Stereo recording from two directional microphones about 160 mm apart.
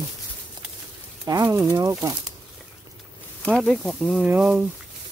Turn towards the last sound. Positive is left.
turn(degrees=-5)  # may be behind; listen again after turning